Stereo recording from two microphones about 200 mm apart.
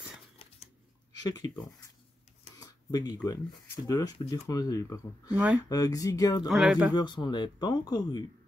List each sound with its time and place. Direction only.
1.2 s speech: 20° left (ahead or behind)
2.6 s a sound: 20° left (ahead or behind)
3.8 s speech: 20° left (ahead or behind)
5.3 s speech: 5° right (ahead or behind)
5.7 s speech: 15° left (ahead or behind)
6.4 s speech: centre (ahead or behind)
6.9 s speech: 20° left (ahead or behind)